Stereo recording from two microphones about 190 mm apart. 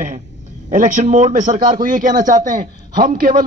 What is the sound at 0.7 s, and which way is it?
A man's voice, 40° right (ahead or behind).